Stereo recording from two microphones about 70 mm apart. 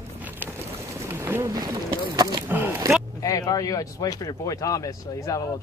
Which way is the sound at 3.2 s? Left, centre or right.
Left.